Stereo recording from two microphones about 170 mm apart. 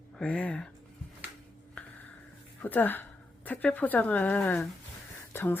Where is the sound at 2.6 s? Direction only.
10° left (ahead or behind).